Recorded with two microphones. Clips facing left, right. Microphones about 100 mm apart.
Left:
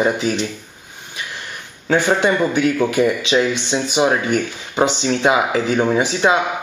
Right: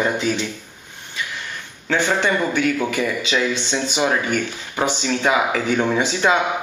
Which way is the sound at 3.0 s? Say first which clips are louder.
Left 6 dB; 25° left (ahead or behind).